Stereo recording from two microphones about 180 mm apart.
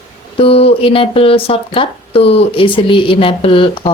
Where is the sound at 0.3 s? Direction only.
30° left (ahead or behind).